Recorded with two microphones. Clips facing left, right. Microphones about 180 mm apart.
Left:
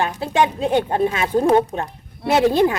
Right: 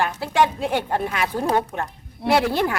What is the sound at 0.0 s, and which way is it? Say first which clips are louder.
Speech: left 1 dB; 20° left (ahead or behind).